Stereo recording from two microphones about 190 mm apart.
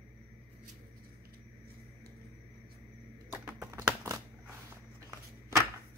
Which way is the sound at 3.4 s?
15° right (ahead or behind).